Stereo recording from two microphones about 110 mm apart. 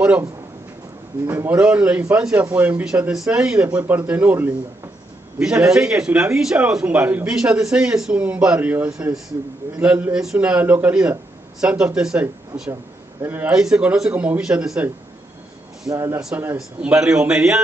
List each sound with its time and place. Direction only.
1.2 s speech: 20° right (ahead or behind)
5.4 s speech: 5° right (ahead or behind)
13.2 s speech: 15° right (ahead or behind)
15.9 s speech: 25° right (ahead or behind)
16.5 s speech: 5° right (ahead or behind)